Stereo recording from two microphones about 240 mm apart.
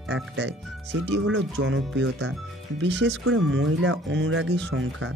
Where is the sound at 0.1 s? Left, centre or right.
Right.